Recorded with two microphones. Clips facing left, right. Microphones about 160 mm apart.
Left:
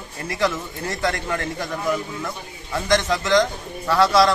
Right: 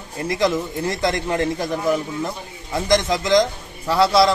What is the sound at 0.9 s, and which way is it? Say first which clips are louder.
A man's voice: right 1 dB; 20° right (ahead or behind).